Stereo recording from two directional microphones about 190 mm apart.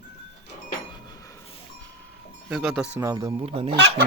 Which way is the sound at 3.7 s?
65° right (ahead or behind).